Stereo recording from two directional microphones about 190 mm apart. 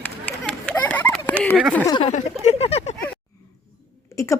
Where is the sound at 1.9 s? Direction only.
25° left (ahead or behind).